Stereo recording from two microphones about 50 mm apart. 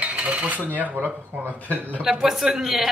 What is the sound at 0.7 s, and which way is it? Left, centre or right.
Speech, right.